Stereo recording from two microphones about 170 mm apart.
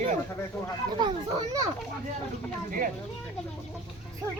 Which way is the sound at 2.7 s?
55° right (ahead or behind).